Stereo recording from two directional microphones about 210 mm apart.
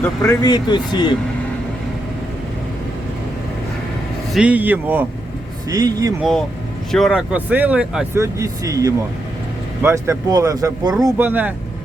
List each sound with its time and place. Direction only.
0.0 s speech: 10° left (ahead or behind)
0.4 s speech: 20° left (ahead or behind)
4.4 s speech: 5° right (ahead or behind)
6.9 s speech: centre (ahead or behind)